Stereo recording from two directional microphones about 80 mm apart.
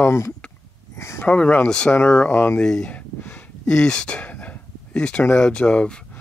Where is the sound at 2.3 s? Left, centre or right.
Left.